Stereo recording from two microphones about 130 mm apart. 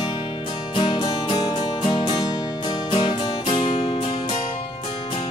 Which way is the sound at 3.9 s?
50° left (ahead or behind).